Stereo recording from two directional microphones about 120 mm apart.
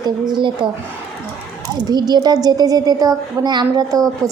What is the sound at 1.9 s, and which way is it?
A woman's voice, 35° right (ahead or behind).